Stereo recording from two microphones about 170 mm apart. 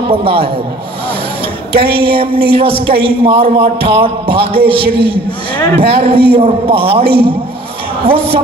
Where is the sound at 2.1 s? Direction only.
30° right (ahead or behind).